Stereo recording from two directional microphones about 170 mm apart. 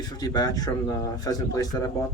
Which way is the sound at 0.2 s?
20° left (ahead or behind).